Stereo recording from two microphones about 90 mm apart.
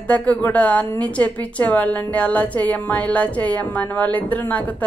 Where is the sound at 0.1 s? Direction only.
15° left (ahead or behind).